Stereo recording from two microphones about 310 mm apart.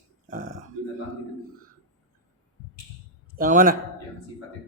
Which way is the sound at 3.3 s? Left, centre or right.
Right.